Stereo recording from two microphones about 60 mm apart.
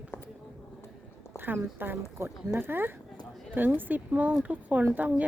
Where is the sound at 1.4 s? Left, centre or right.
Right.